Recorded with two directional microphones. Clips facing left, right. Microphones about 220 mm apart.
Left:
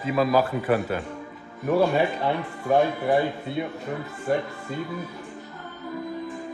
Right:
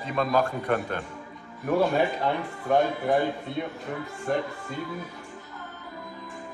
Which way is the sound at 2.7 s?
5° left (ahead or behind).